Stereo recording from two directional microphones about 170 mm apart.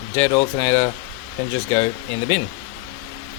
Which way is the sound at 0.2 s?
15° left (ahead or behind).